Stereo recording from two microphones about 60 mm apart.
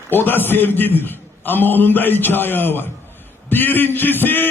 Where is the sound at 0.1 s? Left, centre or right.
Left.